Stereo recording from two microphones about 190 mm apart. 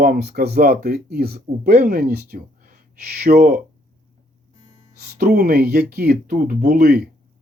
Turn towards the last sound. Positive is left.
turn(degrees=-55)  # may be behind; listen again after turning